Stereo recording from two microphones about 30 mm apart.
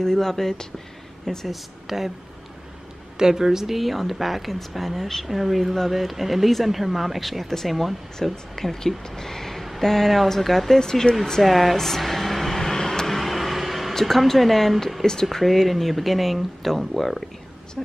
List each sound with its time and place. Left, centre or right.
0.0 s speech: centre
1.5 s speech: centre
3.2 s speech: centre
3.7 s speech: centre
8.7 s speech: centre
10.8 s speech: centre
11.4 s speech: centre
12.7 s vehicle: left
13.0 s vehicle: centre
13.9 s speech: centre